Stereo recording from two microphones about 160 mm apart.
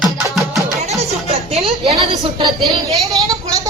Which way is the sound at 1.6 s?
40° right (ahead or behind).